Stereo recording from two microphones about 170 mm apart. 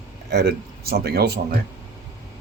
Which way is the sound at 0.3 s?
70° right (ahead or behind).